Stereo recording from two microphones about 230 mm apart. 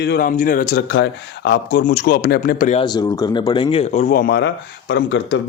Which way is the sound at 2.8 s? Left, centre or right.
Centre.